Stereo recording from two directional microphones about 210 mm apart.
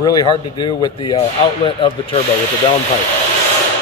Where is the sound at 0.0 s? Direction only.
20° left (ahead or behind).